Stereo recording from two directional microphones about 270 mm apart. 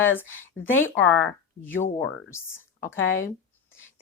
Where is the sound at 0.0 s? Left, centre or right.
Centre.